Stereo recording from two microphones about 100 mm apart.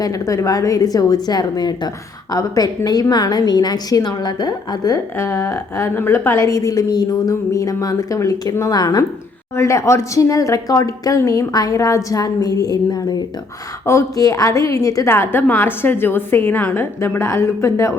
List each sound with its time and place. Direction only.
0.0 s a woman's voice: 35° left (ahead or behind)
5.1 s a woman's voice: 30° left (ahead or behind)
6.5 s speech: 35° left (ahead or behind)
9.6 s speech: 30° left (ahead or behind)
15.1 s a woman's voice: 25° left (ahead or behind)